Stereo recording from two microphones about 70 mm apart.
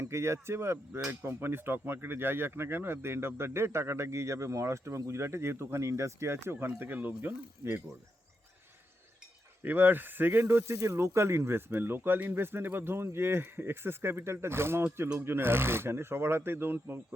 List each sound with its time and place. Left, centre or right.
0.0 s speech: right
9.6 s speech: right
10.6 s speech: right